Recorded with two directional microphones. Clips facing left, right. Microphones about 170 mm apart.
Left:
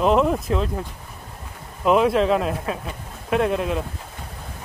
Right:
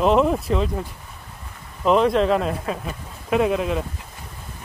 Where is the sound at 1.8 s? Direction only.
5° left (ahead or behind).